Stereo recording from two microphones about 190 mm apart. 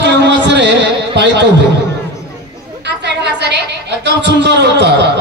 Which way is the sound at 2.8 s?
65° right (ahead or behind).